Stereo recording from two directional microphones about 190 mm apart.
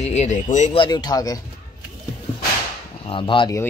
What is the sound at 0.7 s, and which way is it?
Speech, 25° left (ahead or behind).